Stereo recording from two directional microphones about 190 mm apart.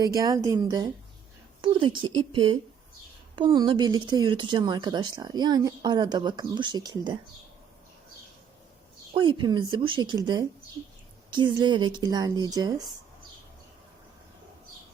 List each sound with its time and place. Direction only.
0.0 s speech: 20° right (ahead or behind)
9.1 s speech: 25° right (ahead or behind)